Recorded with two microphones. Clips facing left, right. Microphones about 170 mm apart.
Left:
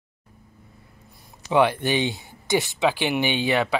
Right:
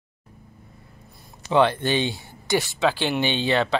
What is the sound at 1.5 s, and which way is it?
Speech, 10° left (ahead or behind).